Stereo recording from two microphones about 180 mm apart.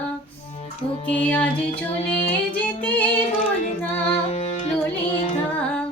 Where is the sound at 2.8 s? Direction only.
10° left (ahead or behind).